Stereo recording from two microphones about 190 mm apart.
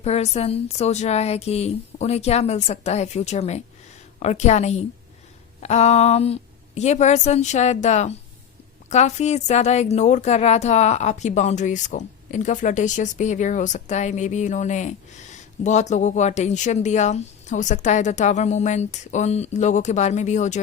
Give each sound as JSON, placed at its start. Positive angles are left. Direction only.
{"t": 0.0, "sound": "a woman's voice", "side_deg": 35}